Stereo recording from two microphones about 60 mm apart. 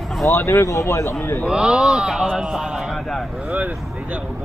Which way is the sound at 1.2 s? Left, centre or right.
Left.